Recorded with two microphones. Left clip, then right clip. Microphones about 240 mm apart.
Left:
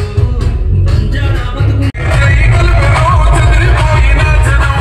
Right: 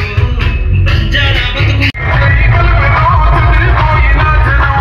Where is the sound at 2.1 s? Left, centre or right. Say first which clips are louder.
Left 2 dB; left.